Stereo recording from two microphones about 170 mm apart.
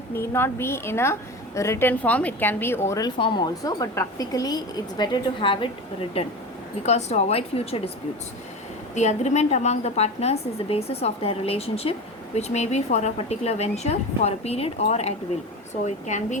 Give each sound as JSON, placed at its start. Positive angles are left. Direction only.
{"t": 0.1, "sound": "a woman's voice", "side_deg": 15}
{"t": 3.2, "sound": "a woman's voice", "side_deg": 30}
{"t": 9.0, "sound": "a woman's voice", "side_deg": 40}